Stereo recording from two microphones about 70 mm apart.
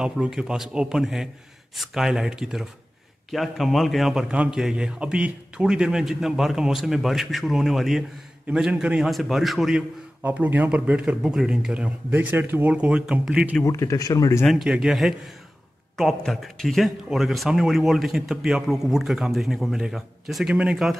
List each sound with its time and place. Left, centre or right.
0.0 s a man's voice: centre
9.1 s speech: centre
10.2 s a man's voice: right
12.1 s speech: right
12.7 s a man's voice: centre
13.7 s speech: left
14.5 s a man's voice: centre
16.3 s speech: centre
20.4 s a man's voice: centre